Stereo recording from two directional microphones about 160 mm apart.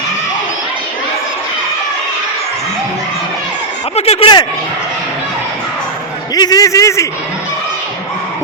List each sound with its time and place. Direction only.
3.9 s speech: 40° left (ahead or behind)
6.3 s a man's voice: 25° left (ahead or behind)